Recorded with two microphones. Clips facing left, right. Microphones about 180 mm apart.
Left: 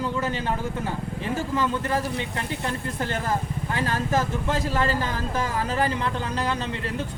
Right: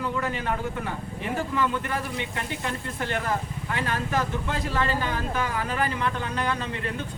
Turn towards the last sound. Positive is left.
turn(degrees=30)  # may be behind; listen again after turning